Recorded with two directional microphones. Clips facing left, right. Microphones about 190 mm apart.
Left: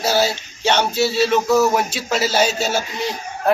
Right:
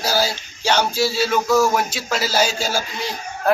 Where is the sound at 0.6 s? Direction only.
Centre (ahead or behind).